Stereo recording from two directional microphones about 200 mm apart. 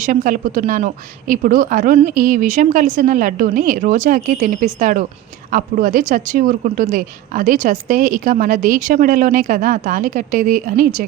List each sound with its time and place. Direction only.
0.0 s speech: 40° right (ahead or behind)